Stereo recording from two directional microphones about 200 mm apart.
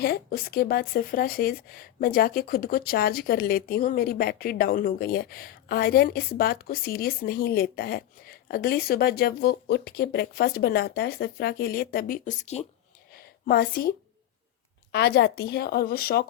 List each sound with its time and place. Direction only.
0.0 s speech: 50° left (ahead or behind); by 12.6 s 35° left (ahead or behind)
13.5 s speech: 50° left (ahead or behind)
14.9 s speech: 55° left (ahead or behind)